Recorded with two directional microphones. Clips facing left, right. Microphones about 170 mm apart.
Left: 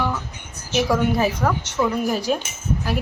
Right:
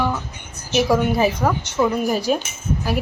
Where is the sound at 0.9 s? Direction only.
10° right (ahead or behind).